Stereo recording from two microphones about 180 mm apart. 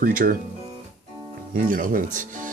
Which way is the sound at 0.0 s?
50° right (ahead or behind).